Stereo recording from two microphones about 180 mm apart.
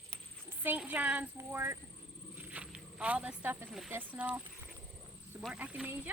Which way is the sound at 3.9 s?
10° right (ahead or behind).